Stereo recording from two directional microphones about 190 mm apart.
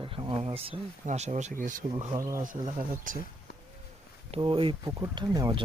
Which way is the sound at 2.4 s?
45° right (ahead or behind).